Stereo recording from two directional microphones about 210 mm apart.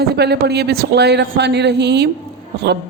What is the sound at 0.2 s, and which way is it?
A woman's voice, 50° right (ahead or behind).